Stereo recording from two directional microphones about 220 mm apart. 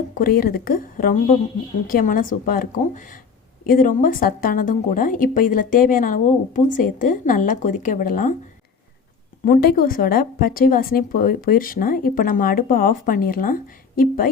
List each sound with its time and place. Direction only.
0.1 s a woman's voice: 40° left (ahead or behind)
9.4 s a woman's voice: 45° left (ahead or behind)